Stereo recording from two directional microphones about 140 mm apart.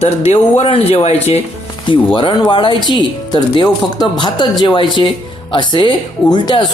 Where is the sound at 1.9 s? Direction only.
35° left (ahead or behind).